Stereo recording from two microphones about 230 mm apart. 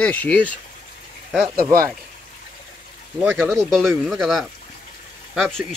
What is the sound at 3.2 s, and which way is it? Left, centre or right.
Speech, centre.